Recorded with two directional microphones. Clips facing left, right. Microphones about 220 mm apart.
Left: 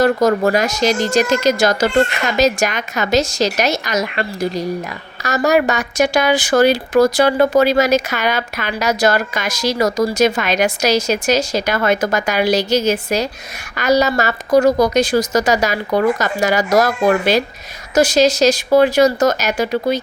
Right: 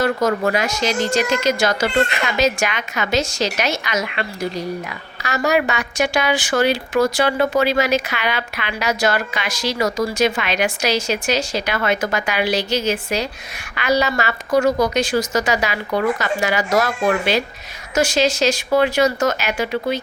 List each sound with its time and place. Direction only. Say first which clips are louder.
0.0 s speech: left 5 dB; 40° left (ahead or behind)